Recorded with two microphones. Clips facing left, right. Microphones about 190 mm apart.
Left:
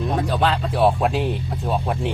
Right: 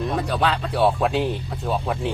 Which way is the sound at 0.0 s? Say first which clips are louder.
Left 2 dB; centre (ahead or behind).